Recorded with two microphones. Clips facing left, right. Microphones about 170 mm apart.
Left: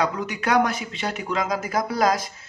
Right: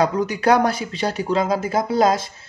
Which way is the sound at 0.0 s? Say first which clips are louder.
Right 6 dB; 35° right (ahead or behind).